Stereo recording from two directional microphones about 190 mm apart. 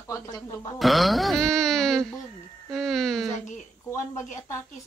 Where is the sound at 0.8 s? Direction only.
Centre (ahead or behind).